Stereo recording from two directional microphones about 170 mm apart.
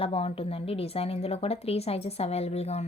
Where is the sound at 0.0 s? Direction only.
35° left (ahead or behind).